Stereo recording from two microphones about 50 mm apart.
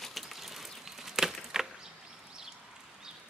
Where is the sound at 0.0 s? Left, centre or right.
Centre.